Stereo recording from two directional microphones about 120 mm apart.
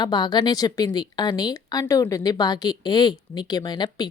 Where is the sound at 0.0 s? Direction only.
35° left (ahead or behind).